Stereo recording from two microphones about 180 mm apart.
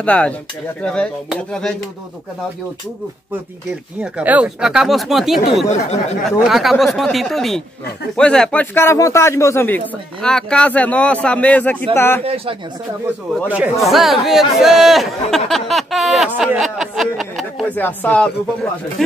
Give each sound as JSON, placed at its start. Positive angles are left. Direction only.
{"t": 0.0, "sound": "a man's voice", "side_deg": 5}
{"t": 4.0, "sound": "speech", "side_deg": -10}
{"t": 5.7, "sound": "speech", "side_deg": 35}
{"t": 6.4, "sound": "a man's voice", "side_deg": 0}
{"t": 10.2, "sound": "a man's voice", "side_deg": 5}
{"t": 12.2, "sound": "speech", "side_deg": -35}
{"t": 13.8, "sound": "speech", "side_deg": 0}